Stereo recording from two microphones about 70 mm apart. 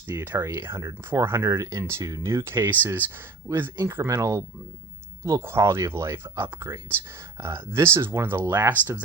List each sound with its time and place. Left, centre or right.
0.1 s speech: right
0.8 s speech: right
1.2 s speech: right